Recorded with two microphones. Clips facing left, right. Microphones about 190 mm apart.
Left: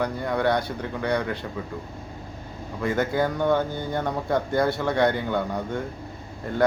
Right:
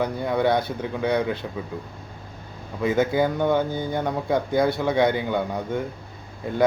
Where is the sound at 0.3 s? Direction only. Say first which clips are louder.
Right 2 dB; 20° right (ahead or behind).